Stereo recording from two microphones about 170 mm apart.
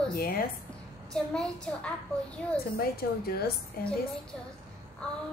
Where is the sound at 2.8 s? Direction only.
65° left (ahead or behind).